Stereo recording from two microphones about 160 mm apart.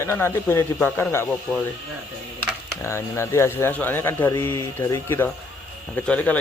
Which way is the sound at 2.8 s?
15° left (ahead or behind).